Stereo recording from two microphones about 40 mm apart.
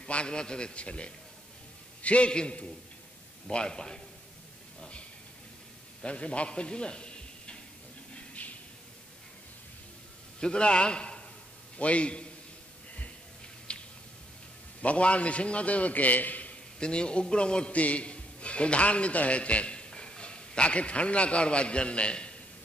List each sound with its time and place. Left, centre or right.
0.0 s a man's voice: left
6.0 s a man's voice: left
8.4 s a sound: left
10.4 s a man's voice: left
13.7 s a sound: left
14.8 s a man's voice: left
16.8 s a man's voice: left